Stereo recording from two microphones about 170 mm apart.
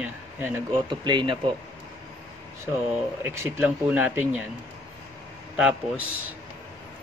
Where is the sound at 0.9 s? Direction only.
25° right (ahead or behind).